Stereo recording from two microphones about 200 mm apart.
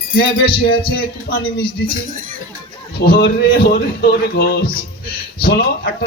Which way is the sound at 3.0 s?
55° left (ahead or behind).